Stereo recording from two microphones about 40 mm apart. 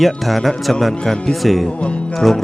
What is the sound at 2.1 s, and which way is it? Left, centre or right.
Speech, centre.